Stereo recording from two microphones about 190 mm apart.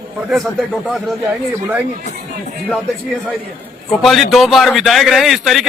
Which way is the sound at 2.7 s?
5° left (ahead or behind).